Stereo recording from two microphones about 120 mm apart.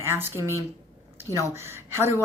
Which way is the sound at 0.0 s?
20° right (ahead or behind).